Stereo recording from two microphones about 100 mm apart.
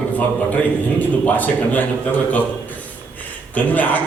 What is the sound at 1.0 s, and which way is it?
Speech, 15° left (ahead or behind).